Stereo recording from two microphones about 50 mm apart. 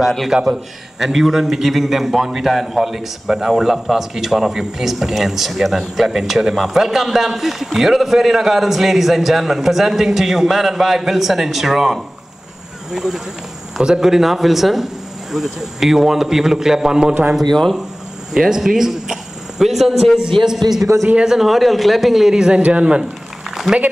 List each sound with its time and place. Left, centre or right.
0.3 s a man's voice: centre
0.9 s a man's voice: centre
17.4 s a man's voice: centre
18.3 s a man's voice: centre
20.4 s a man's voice: centre
21.2 s a man's voice: centre
23.7 s a man's voice: centre